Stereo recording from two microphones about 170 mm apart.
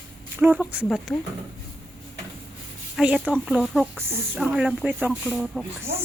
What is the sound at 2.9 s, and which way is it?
Speech, 5° right (ahead or behind).